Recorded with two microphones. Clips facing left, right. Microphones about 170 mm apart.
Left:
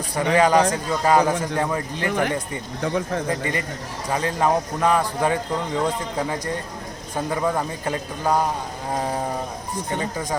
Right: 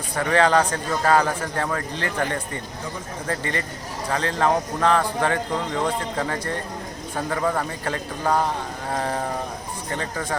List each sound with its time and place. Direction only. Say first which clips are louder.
0.2 s a man's voice: left 2 dB; 15° left (ahead or behind)